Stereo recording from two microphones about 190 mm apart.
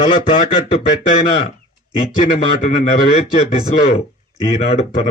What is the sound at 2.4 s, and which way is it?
Speech, 35° left (ahead or behind).